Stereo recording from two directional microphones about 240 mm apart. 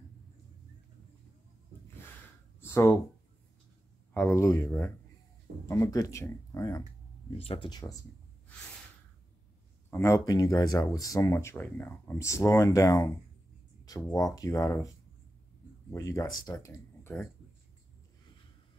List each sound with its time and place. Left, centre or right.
2.7 s speech: centre
4.1 s speech: centre
9.8 s speech: centre